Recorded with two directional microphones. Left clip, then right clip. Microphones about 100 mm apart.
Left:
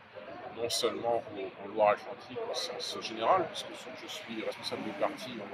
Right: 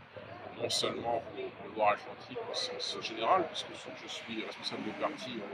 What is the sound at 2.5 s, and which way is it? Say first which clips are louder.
A man's voice: even; 60° left (ahead or behind).